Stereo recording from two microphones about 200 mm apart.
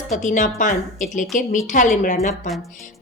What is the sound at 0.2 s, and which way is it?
A woman's voice, 40° left (ahead or behind).